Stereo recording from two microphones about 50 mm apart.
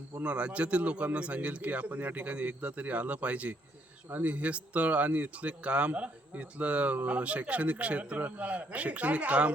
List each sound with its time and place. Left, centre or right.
0.2 s a man's voice: right